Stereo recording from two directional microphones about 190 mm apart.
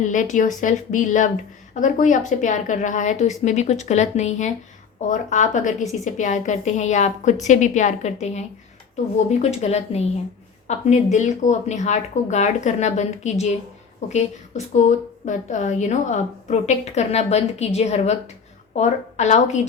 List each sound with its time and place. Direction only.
0.1 s a woman's voice: 40° left (ahead or behind)